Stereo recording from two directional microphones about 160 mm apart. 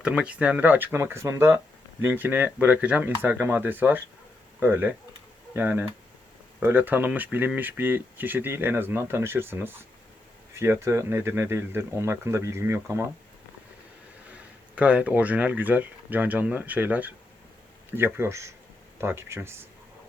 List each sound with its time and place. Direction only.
0.0 s speech: 5° right (ahead or behind)
14.8 s speech: 10° right (ahead or behind)